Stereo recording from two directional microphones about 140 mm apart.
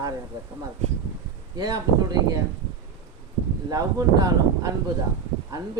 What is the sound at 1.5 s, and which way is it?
Speech, 30° right (ahead or behind).